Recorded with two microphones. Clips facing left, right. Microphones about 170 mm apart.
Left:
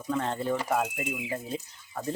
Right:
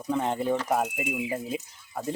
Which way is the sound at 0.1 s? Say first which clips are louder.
Right 3 dB; 15° right (ahead or behind).